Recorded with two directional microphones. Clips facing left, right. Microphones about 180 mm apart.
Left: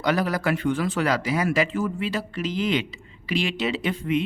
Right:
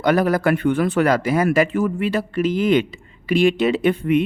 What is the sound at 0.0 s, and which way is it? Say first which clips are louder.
Speech: right 6 dB; 55° right (ahead or behind).